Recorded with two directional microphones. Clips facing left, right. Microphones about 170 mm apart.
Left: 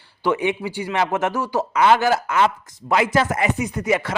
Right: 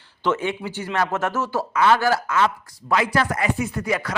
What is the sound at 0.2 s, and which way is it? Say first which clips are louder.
Speech: left 2 dB; 15° left (ahead or behind).